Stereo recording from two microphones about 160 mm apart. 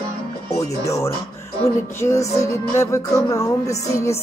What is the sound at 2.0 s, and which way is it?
Music, 20° left (ahead or behind).